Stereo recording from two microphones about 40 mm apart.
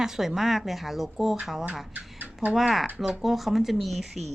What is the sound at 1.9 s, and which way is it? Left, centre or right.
Speech, right.